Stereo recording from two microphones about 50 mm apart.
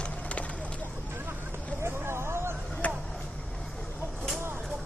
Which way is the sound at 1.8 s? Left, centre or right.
Right.